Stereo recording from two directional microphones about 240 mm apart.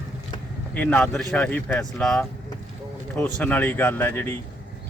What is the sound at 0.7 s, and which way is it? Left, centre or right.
Speech, centre.